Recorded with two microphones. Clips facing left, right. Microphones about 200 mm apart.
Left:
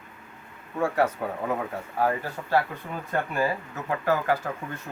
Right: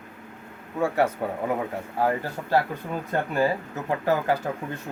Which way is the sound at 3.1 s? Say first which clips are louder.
Right 2 dB; 30° right (ahead or behind).